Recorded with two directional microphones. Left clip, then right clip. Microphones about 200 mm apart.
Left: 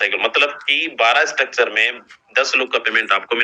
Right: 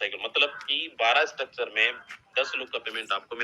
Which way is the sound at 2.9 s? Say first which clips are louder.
Left 14 dB; 90° left.